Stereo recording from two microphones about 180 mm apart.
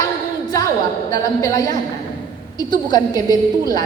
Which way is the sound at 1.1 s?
20° left (ahead or behind).